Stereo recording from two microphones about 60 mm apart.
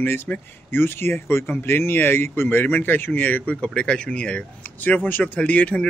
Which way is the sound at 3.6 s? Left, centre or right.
Centre.